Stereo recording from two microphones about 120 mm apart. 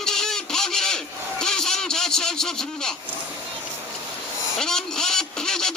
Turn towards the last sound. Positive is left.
turn(degrees=5)  # may be behind; listen again after turning